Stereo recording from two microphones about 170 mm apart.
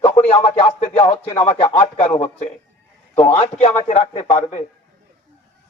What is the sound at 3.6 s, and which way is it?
A man's voice, 40° left (ahead or behind).